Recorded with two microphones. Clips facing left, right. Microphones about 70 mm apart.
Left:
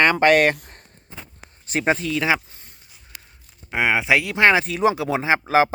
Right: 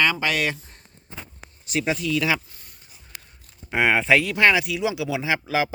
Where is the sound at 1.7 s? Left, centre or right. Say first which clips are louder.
Left 3 dB; left.